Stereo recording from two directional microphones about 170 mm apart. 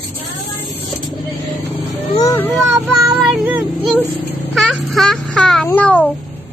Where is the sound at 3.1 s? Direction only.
Centre (ahead or behind).